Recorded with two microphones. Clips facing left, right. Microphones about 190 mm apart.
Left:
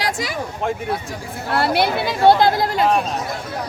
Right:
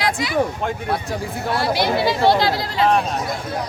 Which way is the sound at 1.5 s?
60° left (ahead or behind).